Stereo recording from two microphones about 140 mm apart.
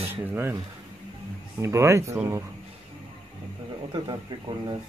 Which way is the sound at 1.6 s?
20° right (ahead or behind).